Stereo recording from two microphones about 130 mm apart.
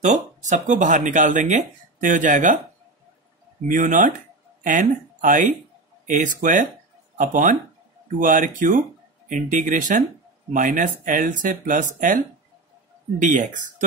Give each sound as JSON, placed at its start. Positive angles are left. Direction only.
{"t": 0.0, "sound": "speech", "side_deg": -70}
{"t": 3.6, "sound": "speech", "side_deg": -90}
{"t": 8.2, "sound": "speech", "side_deg": -90}
{"t": 13.2, "sound": "speech", "side_deg": -80}